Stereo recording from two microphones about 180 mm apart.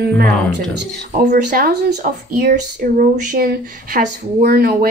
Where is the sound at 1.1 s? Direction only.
45° right (ahead or behind).